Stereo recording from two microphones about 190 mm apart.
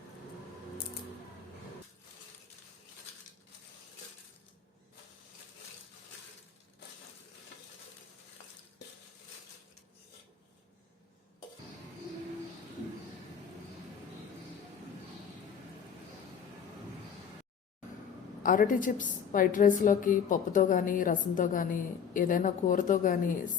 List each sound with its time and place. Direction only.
18.4 s a woman's voice: 45° left (ahead or behind)